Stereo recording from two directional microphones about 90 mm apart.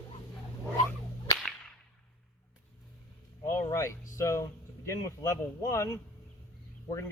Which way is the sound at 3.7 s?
35° left (ahead or behind).